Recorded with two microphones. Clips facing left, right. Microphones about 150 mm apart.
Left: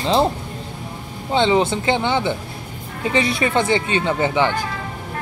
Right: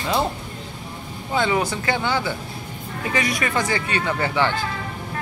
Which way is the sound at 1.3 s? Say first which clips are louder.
Left 5 dB; 25° left (ahead or behind).